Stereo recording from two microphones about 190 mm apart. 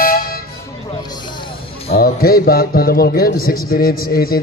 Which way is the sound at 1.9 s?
50° left (ahead or behind).